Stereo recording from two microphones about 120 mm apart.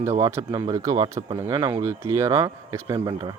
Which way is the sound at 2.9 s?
35° right (ahead or behind).